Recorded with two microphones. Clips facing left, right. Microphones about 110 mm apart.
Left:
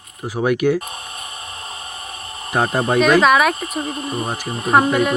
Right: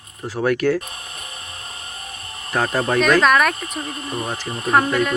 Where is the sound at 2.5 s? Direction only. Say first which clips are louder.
Left 2 dB; 15° left (ahead or behind).